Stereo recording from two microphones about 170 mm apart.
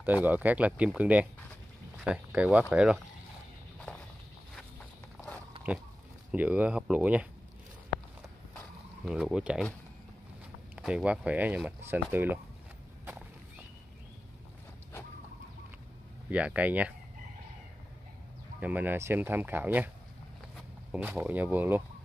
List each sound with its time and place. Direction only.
0.0 s speech: 10° right (ahead or behind)
6.3 s speech: 10° right (ahead or behind)
9.0 s speech: 5° right (ahead or behind)
10.8 s speech: 5° right (ahead or behind)
16.3 s speech: 10° right (ahead or behind)
18.6 s speech: 10° right (ahead or behind)
20.9 s speech: 10° right (ahead or behind)